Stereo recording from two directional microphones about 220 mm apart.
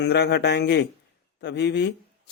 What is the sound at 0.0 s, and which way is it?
Speech, 50° left (ahead or behind).